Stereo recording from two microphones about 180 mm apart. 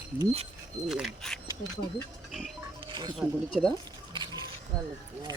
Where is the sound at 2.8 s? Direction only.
25° right (ahead or behind).